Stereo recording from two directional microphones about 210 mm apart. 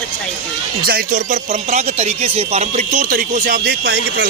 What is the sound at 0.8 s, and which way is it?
Speech, 40° right (ahead or behind).